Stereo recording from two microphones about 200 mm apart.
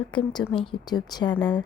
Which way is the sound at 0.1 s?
25° left (ahead or behind).